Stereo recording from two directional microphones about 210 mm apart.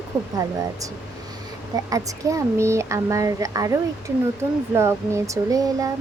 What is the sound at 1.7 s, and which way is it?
Speech, 15° right (ahead or behind).